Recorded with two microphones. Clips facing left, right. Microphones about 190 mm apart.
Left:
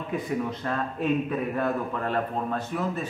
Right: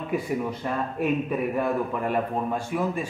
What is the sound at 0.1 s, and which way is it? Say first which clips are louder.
A man's voice: right 1 dB; 10° right (ahead or behind).